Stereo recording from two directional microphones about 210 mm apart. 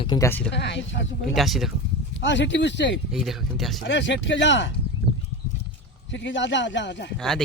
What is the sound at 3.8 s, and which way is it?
Speech, 60° left (ahead or behind).